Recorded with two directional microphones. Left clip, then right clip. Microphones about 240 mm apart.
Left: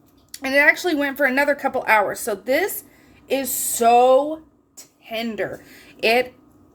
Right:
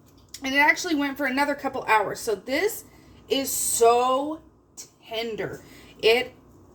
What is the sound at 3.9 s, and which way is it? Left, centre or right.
A woman's voice, left.